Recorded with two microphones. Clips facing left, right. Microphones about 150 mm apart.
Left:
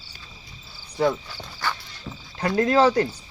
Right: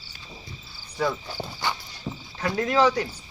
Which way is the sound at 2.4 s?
35° left (ahead or behind).